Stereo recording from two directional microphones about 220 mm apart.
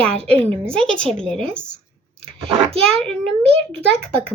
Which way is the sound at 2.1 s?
25° right (ahead or behind).